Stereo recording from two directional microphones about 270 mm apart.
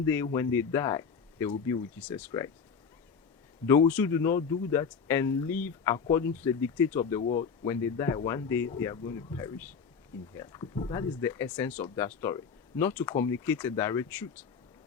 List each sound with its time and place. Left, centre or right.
0.0 s speech: centre
3.7 s speech: centre
7.2 s speech: left
7.7 s speech: centre